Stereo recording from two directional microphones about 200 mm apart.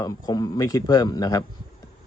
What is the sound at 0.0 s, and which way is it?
A man's voice, 15° left (ahead or behind).